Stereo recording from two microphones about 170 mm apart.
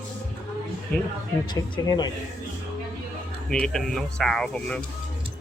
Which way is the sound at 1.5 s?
25° left (ahead or behind).